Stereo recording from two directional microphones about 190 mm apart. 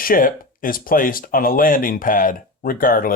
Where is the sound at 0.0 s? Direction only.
50° left (ahead or behind).